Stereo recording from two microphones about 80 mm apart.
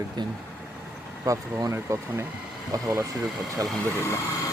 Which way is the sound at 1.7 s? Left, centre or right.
Right.